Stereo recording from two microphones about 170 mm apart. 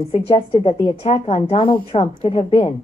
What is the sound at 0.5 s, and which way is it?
A woman's voice, 35° left (ahead or behind).